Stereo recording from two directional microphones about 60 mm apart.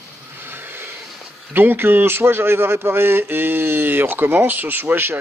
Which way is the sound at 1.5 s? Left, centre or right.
Right.